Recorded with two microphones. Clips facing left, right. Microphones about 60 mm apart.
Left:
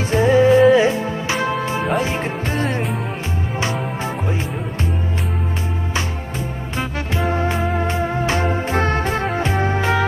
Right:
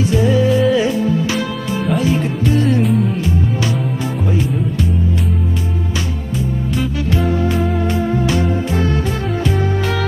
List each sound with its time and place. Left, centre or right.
0.0 s music: left
7.2 s music: left